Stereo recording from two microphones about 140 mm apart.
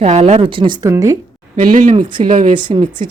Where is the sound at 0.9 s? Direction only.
25° right (ahead or behind).